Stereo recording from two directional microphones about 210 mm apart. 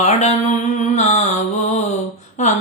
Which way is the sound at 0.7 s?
35° left (ahead or behind).